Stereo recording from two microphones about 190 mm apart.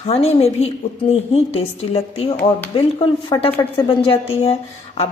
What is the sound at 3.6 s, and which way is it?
A woman's voice, 30° left (ahead or behind).